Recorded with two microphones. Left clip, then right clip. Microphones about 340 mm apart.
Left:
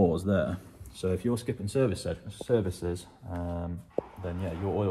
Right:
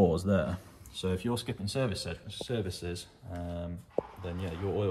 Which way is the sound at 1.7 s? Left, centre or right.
Centre.